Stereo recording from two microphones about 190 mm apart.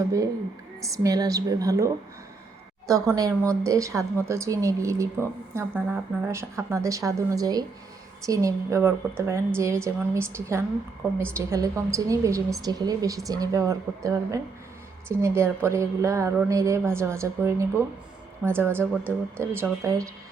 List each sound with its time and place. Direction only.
0.8 s a woman's voice: 15° right (ahead or behind)